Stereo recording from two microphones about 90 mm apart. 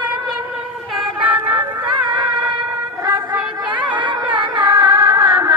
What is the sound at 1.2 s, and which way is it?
Music, 20° right (ahead or behind).